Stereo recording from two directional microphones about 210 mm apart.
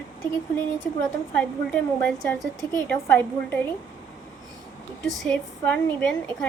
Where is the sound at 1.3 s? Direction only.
5° left (ahead or behind).